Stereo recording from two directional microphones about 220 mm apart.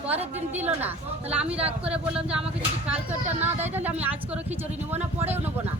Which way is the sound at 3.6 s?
10° right (ahead or behind).